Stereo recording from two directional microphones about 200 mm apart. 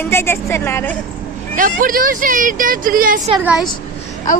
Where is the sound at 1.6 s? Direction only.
45° right (ahead or behind).